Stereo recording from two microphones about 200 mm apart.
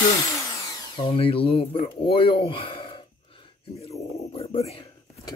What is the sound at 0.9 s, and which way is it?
Speech, 25° left (ahead or behind).